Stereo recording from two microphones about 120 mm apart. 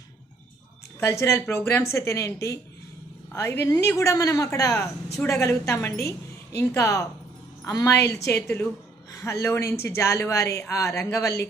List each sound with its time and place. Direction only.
0.9 s speech: 25° left (ahead or behind)